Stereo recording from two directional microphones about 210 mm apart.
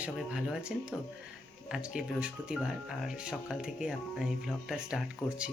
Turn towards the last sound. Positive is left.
turn(degrees=-5)  # may be behind; listen again after turning